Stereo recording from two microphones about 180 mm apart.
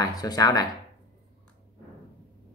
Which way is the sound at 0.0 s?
20° left (ahead or behind).